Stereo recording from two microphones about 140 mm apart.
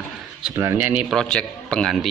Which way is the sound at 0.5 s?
20° right (ahead or behind).